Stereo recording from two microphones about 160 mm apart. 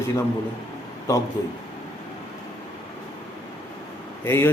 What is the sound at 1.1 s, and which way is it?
Speech, 20° left (ahead or behind).